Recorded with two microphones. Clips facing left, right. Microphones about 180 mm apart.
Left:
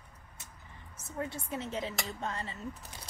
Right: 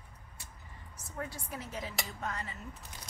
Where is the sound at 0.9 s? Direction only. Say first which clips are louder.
Left 4 dB; 25° left (ahead or behind).